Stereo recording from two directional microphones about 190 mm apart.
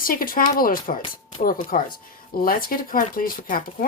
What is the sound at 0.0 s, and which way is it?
Speech, 50° left (ahead or behind).